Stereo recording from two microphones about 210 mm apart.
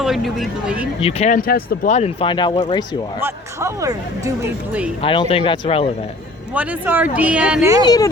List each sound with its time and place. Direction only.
0.0 s speech: centre (ahead or behind)
1.0 s speech: 30° left (ahead or behind)
3.2 s speech: 10° right (ahead or behind)
4.9 s speech: 25° left (ahead or behind)
6.5 s speech: 5° right (ahead or behind)
7.9 s speech: 15° left (ahead or behind)